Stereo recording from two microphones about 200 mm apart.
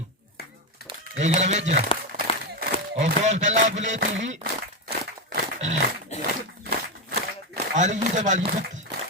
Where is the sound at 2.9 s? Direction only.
35° right (ahead or behind).